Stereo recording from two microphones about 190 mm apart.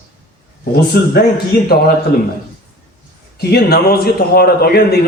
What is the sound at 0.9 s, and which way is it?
Speech, 55° left (ahead or behind).